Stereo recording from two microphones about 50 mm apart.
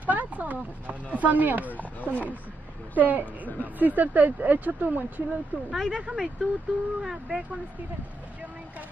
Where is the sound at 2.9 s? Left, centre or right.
Right.